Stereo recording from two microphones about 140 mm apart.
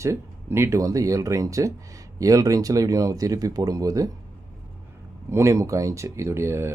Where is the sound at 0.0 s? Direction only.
20° right (ahead or behind).